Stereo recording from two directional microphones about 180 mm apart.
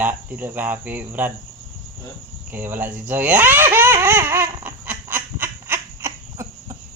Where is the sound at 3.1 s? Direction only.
10° right (ahead or behind).